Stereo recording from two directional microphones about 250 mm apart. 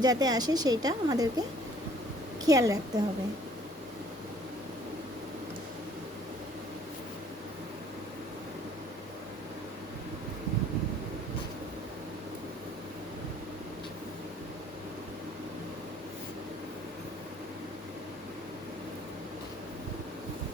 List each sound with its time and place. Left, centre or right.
0.0 s a woman's voice: centre